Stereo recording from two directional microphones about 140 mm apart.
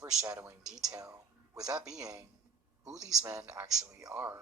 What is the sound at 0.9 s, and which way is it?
Speech, 25° right (ahead or behind).